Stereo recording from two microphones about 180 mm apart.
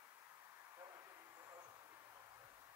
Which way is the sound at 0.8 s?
15° right (ahead or behind).